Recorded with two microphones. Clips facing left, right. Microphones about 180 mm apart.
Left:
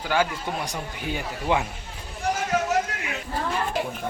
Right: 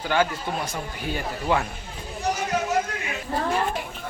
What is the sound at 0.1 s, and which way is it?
A man's voice, 15° left (ahead or behind).